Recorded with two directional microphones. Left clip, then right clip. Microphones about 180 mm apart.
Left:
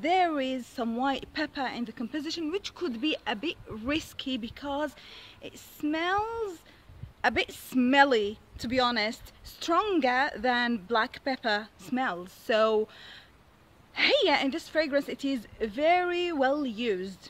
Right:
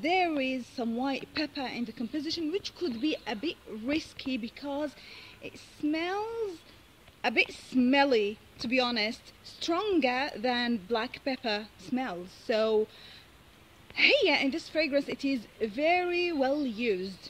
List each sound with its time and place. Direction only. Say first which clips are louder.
0.0 s speech: left 2 dB; 30° left (ahead or behind)